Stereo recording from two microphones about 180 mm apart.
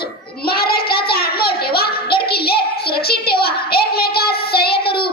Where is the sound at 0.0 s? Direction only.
60° left (ahead or behind).